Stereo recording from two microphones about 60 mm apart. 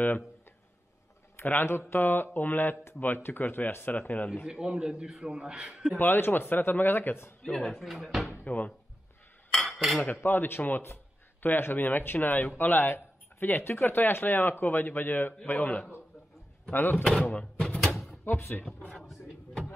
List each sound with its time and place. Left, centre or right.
1.4 s speech: left
4.5 s a man's voice: centre
5.9 s speech: left
7.4 s speech: centre
8.5 s speech: left
9.5 s cutlery: centre
10.2 s speech: left
17.2 s speech: left
17.6 s a sound: centre